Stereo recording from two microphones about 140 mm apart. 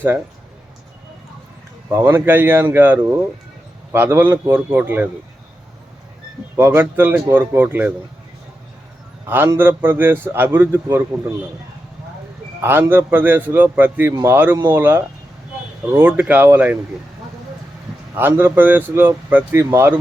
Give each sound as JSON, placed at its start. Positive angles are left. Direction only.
{"t": 1.9, "sound": "speech", "side_deg": -15}
{"t": 6.6, "sound": "speech", "side_deg": -15}
{"t": 9.2, "sound": "speech", "side_deg": -15}
{"t": 12.6, "sound": "speech", "side_deg": -15}
{"t": 14.1, "sound": "speech", "side_deg": -25}
{"t": 18.1, "sound": "speech", "side_deg": -15}